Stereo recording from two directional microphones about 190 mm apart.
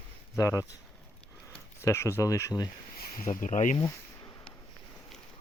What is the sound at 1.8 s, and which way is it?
Speech, 15° left (ahead or behind).